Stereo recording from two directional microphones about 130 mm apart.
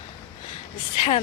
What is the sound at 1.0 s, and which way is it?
Speech, 50° left (ahead or behind).